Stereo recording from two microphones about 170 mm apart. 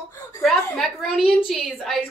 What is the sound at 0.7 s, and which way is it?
A woman's voice, centre (ahead or behind).